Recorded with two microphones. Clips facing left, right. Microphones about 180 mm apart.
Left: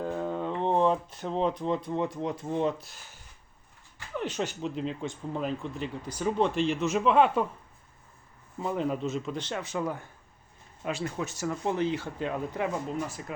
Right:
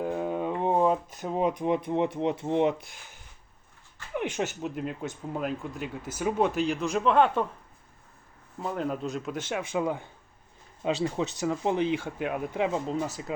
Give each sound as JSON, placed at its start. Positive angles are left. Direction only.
{"t": 0.0, "sound": "speech", "side_deg": -15}
{"t": 4.1, "sound": "speech", "side_deg": -10}
{"t": 8.5, "sound": "speech", "side_deg": 0}
{"t": 9.5, "sound": "speech", "side_deg": -15}